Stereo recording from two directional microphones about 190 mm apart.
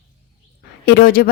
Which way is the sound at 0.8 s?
50° left (ahead or behind).